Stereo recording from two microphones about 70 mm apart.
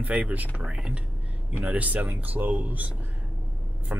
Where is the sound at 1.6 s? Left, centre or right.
Right.